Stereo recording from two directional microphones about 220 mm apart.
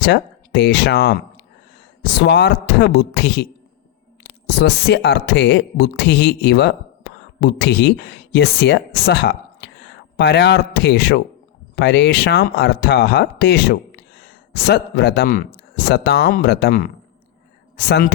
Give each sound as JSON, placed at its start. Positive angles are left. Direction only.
{"t": 0.0, "sound": "speech", "side_deg": 50}
{"t": 4.4, "sound": "speech", "side_deg": 50}